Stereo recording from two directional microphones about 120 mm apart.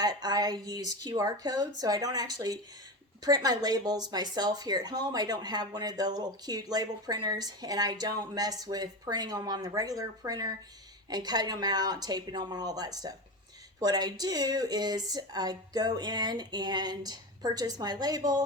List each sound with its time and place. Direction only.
0.0 s speech: 35° right (ahead or behind)